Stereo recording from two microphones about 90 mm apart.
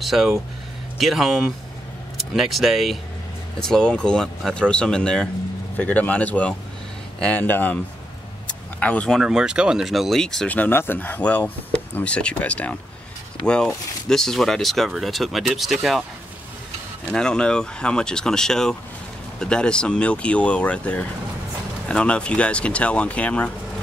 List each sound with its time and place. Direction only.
0.0 s speech: 5° right (ahead or behind); by 9.1 s 15° left (ahead or behind)
9.1 s speech: 5° right (ahead or behind)
10.5 s speech: 20° left (ahead or behind)
14.0 s speech: 5° left (ahead or behind)
17.0 s speech: 10° left (ahead or behind)